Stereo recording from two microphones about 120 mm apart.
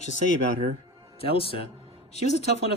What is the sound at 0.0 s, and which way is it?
Speech, 80° left.